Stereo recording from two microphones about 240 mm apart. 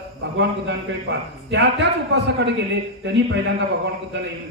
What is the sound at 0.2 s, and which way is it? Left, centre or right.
A man's voice, right.